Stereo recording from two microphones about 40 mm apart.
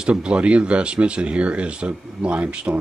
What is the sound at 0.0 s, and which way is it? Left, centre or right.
Speech, right.